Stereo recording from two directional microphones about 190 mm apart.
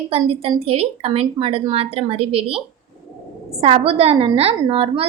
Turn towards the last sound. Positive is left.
turn(degrees=-30)  # may be behind; listen again after turning